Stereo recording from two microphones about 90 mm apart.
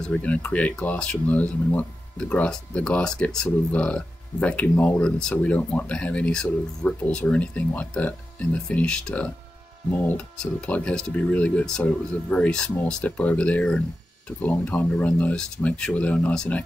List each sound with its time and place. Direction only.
0.1 s speech: 15° left (ahead or behind)